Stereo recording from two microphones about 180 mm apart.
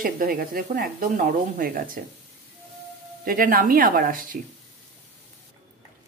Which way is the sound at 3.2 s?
50° right (ahead or behind).